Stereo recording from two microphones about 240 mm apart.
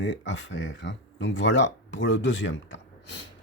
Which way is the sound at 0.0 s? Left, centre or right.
Left.